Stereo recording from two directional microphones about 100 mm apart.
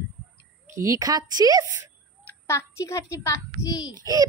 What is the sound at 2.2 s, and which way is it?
A child's voice, 25° left (ahead or behind).